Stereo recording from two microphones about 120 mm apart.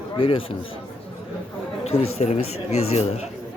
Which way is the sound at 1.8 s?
60° left (ahead or behind).